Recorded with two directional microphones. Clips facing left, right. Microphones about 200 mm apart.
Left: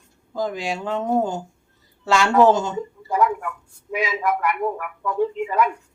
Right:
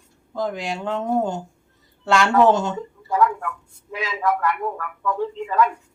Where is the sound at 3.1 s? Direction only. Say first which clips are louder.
Even; 15° left (ahead or behind).